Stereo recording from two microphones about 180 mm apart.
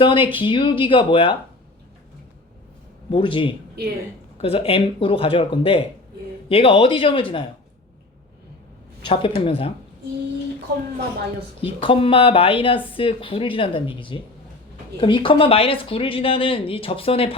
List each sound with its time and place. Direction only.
0.0 s speech: 30° left (ahead or behind)
3.1 s speech: 30° left (ahead or behind)
9.0 s speech: 30° left (ahead or behind)
11.6 s speech: 30° left (ahead or behind)